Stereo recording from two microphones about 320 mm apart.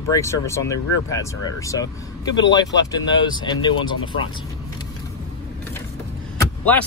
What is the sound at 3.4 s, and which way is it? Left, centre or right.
Speech, centre.